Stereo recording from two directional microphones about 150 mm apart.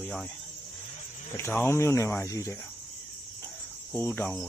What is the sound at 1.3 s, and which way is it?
Speech, 15° left (ahead or behind).